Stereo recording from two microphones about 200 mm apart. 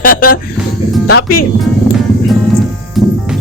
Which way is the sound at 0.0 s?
45° left (ahead or behind).